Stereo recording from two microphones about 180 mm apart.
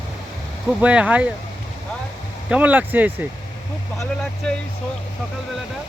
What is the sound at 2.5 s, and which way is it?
Speech, 10° right (ahead or behind).